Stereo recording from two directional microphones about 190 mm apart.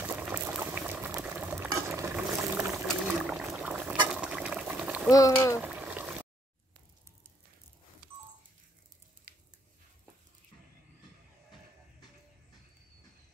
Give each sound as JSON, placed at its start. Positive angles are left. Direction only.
{"t": 0.0, "sound": "boiling", "side_deg": -10}
{"t": 2.6, "sound": "rowboat", "side_deg": -5}
{"t": 4.1, "sound": "water", "side_deg": -5}
{"t": 5.1, "sound": "speech", "side_deg": 15}
{"t": 5.6, "sound": "a sound", "side_deg": -10}